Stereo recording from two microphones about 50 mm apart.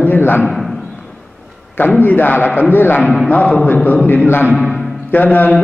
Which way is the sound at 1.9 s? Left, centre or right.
Left.